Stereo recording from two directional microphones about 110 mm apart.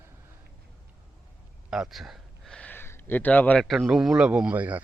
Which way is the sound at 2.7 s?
20° left (ahead or behind).